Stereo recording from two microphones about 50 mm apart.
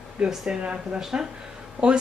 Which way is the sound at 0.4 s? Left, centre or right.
Centre.